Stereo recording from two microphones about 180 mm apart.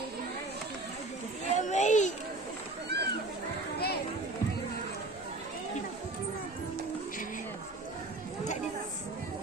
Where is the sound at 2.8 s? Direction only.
65° right (ahead or behind).